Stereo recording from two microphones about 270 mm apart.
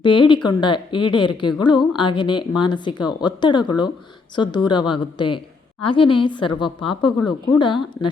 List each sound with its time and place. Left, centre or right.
0.0 s a woman's voice: centre